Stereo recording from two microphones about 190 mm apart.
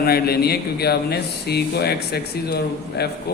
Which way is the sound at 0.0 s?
55° left (ahead or behind).